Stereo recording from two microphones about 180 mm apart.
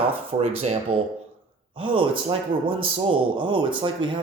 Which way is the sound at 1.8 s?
30° right (ahead or behind).